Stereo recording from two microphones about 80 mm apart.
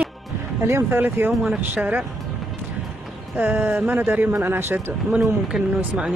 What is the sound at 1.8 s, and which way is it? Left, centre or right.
Speech, right.